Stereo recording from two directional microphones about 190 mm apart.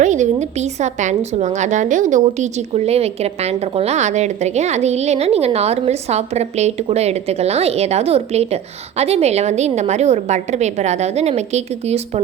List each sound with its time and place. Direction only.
0.0 s a woman's voice: 40° right (ahead or behind)